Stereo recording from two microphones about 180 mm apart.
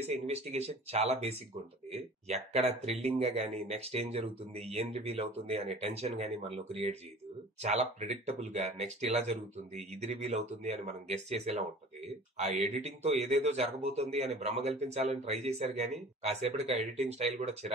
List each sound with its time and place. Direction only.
0.0 s speech: 35° right (ahead or behind)